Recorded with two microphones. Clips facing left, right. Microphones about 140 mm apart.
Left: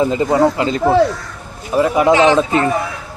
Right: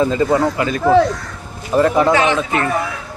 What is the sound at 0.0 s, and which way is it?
Speech, 20° left (ahead or behind).